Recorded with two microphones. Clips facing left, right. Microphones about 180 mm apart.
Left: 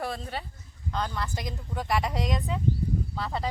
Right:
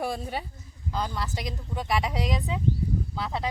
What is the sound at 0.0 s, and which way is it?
Speech, 10° right (ahead or behind).